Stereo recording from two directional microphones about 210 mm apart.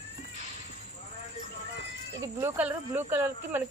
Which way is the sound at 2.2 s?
10° right (ahead or behind).